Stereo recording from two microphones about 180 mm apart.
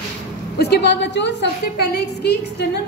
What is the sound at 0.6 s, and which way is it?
A woman's voice, 65° left (ahead or behind).